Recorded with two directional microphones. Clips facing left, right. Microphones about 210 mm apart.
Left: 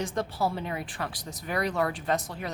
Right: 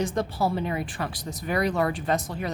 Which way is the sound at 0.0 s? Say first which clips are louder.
Right 3 dB; 5° right (ahead or behind).